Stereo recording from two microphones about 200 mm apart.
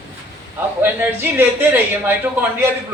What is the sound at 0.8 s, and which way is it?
A man's voice, 10° right (ahead or behind).